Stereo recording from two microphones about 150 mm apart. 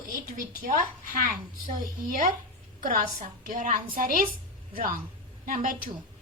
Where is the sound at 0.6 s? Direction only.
65° right (ahead or behind).